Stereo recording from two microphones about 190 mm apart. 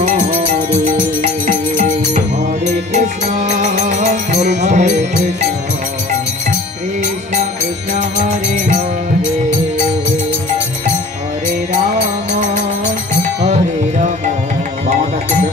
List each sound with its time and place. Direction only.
0.0 s music: 40° right (ahead or behind)
1.8 s music: 40° right (ahead or behind)
7.9 s music: 40° right (ahead or behind)
12.0 s music: 40° right (ahead or behind)